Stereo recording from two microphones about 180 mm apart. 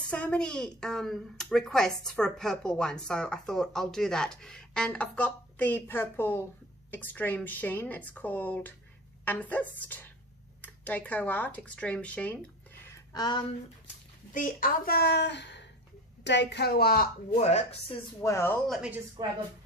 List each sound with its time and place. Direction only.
0.1 s a woman's voice: 5° left (ahead or behind)
13.1 s speech: 25° left (ahead or behind)
14.3 s a woman's voice: 50° left (ahead or behind)
17.4 s speech: 35° left (ahead or behind)
18.2 s a woman's voice: 15° left (ahead or behind)
18.7 s speech: 5° right (ahead or behind)
19.2 s a woman's voice: 20° right (ahead or behind)